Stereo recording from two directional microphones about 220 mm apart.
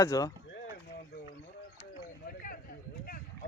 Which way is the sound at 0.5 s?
45° left (ahead or behind).